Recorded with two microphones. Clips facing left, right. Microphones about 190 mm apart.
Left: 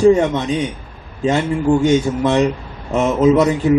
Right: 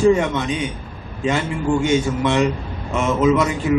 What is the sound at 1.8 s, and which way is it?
A man's voice, 35° left (ahead or behind).